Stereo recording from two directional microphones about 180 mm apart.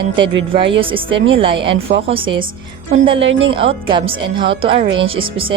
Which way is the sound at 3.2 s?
90° right.